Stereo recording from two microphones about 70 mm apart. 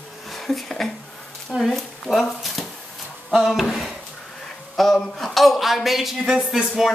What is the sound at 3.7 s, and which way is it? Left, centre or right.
Drawer open or close, centre.